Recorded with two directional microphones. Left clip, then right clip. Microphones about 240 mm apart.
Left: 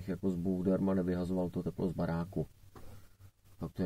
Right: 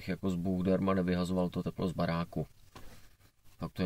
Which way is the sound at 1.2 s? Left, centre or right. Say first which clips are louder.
Right 2 dB; right.